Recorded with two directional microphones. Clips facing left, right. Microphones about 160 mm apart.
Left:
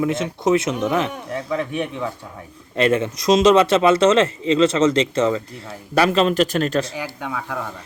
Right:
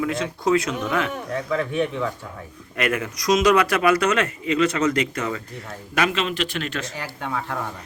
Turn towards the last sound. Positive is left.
turn(degrees=10)  # may be behind; listen again after turning